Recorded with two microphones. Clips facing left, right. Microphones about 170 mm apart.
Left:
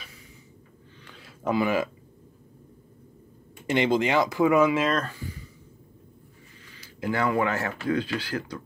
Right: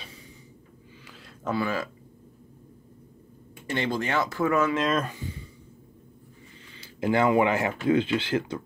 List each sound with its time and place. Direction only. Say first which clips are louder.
1.0 s a sound: left 1 dB; centre (ahead or behind)
1.4 s speech: left 4 dB; 15° left (ahead or behind)
3.6 s speech: left 5 dB; 20° left (ahead or behind)
5.0 s speech: right 1 dB; 20° right (ahead or behind)
6.8 s speech: right 4 dB; 25° right (ahead or behind)